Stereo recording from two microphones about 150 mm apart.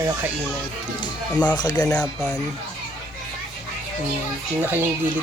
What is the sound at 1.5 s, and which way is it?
Speech, 25° left (ahead or behind).